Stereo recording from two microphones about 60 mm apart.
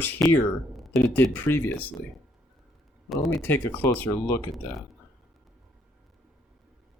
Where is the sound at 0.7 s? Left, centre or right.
Centre.